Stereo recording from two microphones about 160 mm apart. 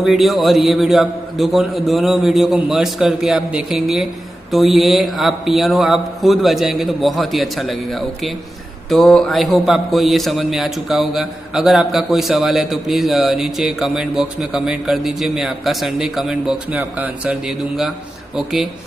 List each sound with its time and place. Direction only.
0.0 s a man's voice: centre (ahead or behind)